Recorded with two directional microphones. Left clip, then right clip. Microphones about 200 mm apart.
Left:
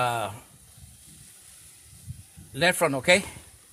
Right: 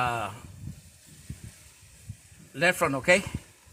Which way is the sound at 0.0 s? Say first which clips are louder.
Left 2 dB; 50° left (ahead or behind).